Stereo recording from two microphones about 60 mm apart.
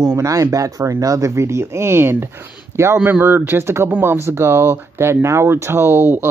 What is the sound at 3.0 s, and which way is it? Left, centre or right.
Speech, right.